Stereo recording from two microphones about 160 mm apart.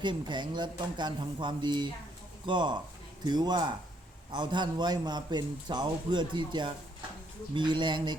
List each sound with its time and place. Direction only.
0.0 s a man's voice: 30° right (ahead or behind)